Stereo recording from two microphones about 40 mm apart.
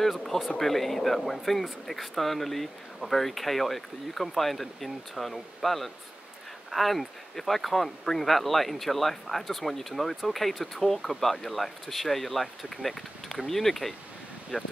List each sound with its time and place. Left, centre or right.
0.0 s speech: centre
14.5 s speech: centre